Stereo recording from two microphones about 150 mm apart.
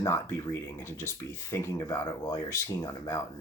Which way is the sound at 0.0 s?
20° left (ahead or behind).